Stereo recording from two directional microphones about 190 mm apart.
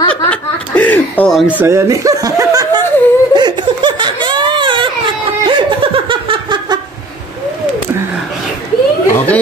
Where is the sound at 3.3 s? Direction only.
20° right (ahead or behind).